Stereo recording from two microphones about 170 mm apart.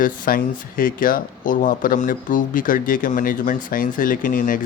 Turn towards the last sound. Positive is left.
turn(degrees=55)  # may be behind; listen again after turning